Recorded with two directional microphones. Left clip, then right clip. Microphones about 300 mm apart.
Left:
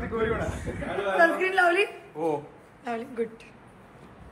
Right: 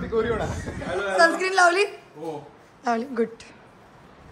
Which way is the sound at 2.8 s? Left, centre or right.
Right.